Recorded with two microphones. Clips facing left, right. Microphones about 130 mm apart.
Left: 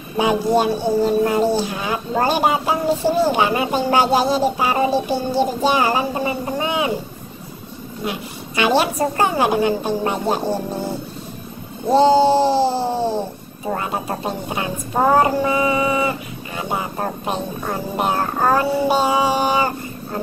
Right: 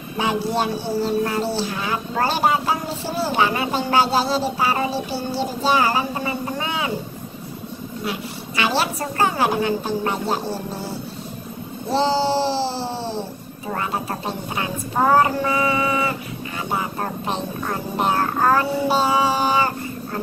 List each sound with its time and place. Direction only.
0.2 s speech: 15° left (ahead or behind)
8.0 s a woman's voice: 20° left (ahead or behind)
11.9 s a sound: 50° left (ahead or behind)
13.7 s a woman's voice: 20° left (ahead or behind)
17.3 s speech: 15° left (ahead or behind)